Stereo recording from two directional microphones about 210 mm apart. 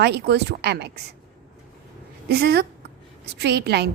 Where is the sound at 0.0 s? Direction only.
55° right (ahead or behind).